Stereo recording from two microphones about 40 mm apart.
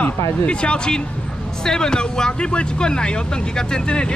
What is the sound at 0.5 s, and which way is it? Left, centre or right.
Speech, left.